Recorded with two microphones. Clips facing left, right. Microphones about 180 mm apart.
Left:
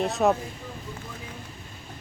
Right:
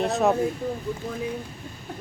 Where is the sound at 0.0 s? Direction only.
Centre (ahead or behind).